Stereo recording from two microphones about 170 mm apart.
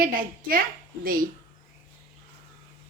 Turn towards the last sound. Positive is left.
turn(degrees=-55)  # may be behind; listen again after turning